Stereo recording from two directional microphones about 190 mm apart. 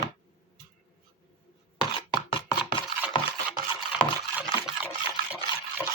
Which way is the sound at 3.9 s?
10° right (ahead or behind).